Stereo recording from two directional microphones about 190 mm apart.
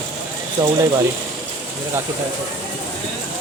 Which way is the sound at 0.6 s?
15° right (ahead or behind).